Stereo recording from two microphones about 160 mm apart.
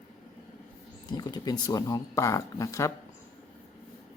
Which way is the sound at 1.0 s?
25° left (ahead or behind).